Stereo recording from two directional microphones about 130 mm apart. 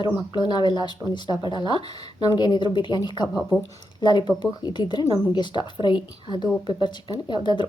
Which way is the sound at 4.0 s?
35° left (ahead or behind).